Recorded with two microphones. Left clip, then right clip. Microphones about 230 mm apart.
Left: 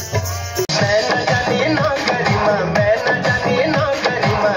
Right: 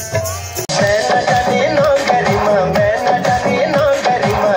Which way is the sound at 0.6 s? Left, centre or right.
Left.